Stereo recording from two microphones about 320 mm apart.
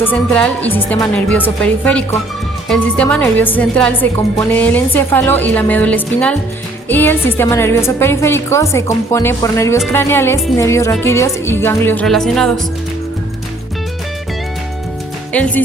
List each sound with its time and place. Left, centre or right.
0.0 s a woman's voice: centre
15.3 s a woman's voice: centre